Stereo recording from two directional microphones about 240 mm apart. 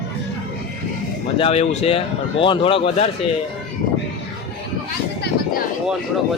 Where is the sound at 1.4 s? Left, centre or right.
Left.